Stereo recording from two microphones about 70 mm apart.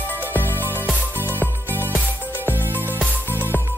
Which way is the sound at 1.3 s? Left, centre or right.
Left.